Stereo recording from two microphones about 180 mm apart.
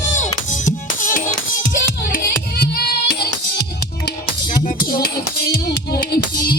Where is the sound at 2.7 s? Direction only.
65° left (ahead or behind).